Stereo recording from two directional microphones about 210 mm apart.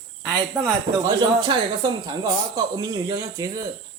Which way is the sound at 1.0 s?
20° right (ahead or behind).